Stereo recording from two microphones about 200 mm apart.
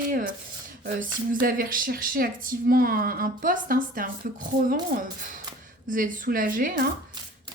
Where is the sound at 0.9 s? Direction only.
45° right (ahead or behind).